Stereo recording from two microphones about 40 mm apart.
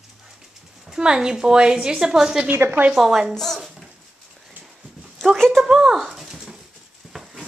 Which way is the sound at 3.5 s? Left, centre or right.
Centre.